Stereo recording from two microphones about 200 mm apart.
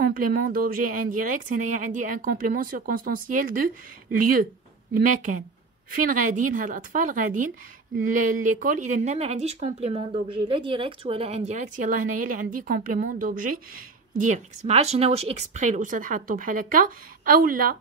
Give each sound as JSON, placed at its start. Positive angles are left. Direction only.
{"t": 0.0, "sound": "a woman's voice", "side_deg": -45}